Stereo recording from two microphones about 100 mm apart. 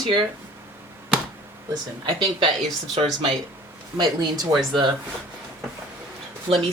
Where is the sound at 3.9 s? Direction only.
40° right (ahead or behind).